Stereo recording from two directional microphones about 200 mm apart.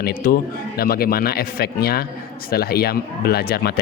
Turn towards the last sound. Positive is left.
turn(degrees=50)  # may be behind; listen again after turning